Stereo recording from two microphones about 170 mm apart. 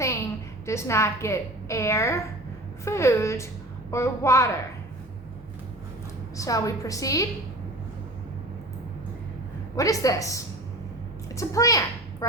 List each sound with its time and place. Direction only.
0.6 s a woman's voice: 15° left (ahead or behind)
6.3 s a woman's voice: 20° left (ahead or behind)
9.7 s a woman's voice: 20° left (ahead or behind)